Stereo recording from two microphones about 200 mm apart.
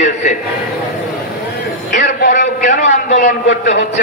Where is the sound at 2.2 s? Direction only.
40° left (ahead or behind).